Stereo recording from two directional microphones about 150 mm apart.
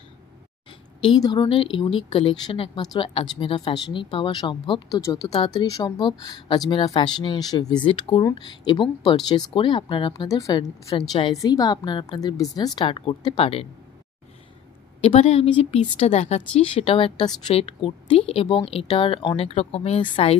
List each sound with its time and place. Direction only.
1.2 s a woman's voice: 30° left (ahead or behind)
15.0 s speech: 40° left (ahead or behind)